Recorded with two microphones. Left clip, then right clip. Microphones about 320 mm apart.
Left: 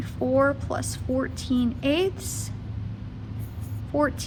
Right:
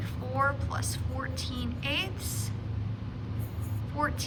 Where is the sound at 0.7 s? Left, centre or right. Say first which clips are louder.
Left 9 dB; centre.